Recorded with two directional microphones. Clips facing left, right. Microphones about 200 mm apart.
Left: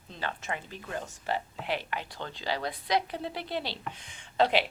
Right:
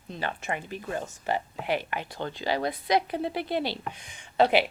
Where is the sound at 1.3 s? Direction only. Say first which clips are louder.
Right 4 dB; 50° right (ahead or behind).